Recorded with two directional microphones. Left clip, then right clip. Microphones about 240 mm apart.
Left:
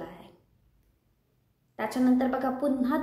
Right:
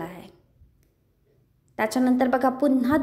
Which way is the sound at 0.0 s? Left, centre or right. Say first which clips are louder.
Right 6 dB; right.